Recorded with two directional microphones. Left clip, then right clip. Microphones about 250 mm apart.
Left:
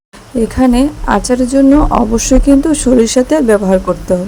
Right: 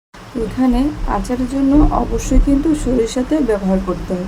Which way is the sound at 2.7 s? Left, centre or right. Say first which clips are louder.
Left 8 dB; left.